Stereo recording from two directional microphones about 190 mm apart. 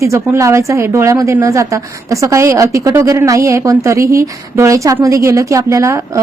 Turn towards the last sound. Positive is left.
turn(degrees=-15)  # may be behind; listen again after turning